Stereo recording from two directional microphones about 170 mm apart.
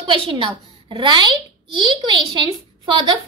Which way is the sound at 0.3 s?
30° right (ahead or behind).